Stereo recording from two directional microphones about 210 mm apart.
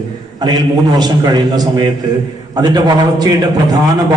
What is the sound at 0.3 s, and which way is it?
A man's voice, 20° right (ahead or behind).